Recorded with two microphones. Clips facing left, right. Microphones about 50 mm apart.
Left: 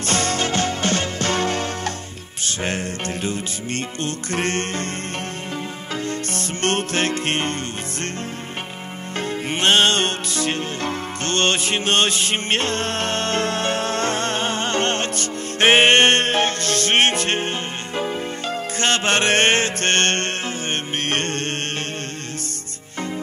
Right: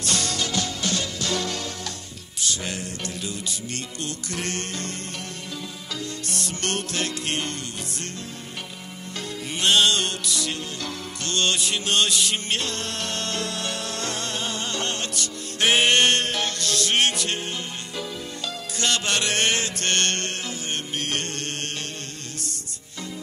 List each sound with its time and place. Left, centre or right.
0.0 s music: left
6.0 s music: left
9.5 s music: left